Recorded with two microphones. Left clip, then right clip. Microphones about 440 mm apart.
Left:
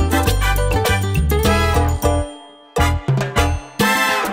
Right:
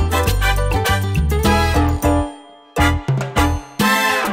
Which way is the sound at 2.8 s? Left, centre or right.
Left.